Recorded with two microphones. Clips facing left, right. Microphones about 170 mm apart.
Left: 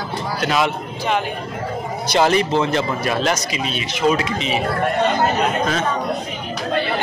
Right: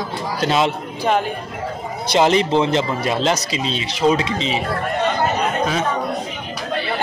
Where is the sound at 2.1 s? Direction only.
20° right (ahead or behind).